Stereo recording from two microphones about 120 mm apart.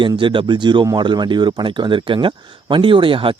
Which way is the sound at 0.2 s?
45° right (ahead or behind).